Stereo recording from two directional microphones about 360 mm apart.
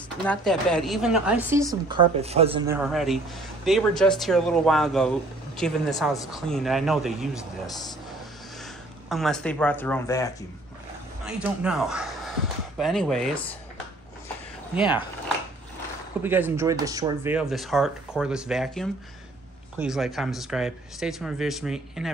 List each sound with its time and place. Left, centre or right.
0.3 s a woman's voice: centre
9.1 s a woman's voice: centre
11.2 s speech: centre
13.3 s speech: centre
16.2 s a woman's voice: centre